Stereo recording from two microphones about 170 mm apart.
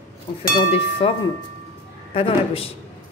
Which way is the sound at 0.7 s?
35° left (ahead or behind).